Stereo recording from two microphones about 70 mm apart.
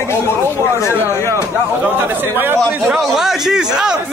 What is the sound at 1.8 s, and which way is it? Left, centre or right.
Speech, right.